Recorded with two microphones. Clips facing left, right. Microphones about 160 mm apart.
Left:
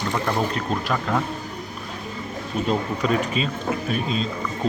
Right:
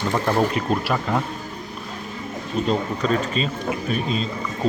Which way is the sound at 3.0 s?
10° left (ahead or behind).